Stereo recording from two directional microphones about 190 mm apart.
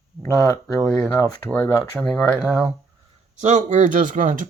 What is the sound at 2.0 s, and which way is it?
Speech, 5° left (ahead or behind).